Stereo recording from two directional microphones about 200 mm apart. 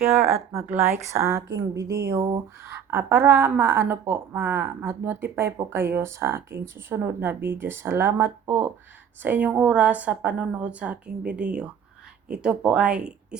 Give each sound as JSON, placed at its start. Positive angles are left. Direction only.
{"t": 0.5, "sound": "speech", "side_deg": -10}
{"t": 1.4, "sound": "speech", "side_deg": -60}
{"t": 1.7, "sound": "speech", "side_deg": -15}